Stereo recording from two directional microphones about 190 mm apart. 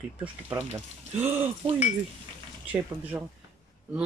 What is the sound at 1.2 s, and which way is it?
Speech, 10° right (ahead or behind).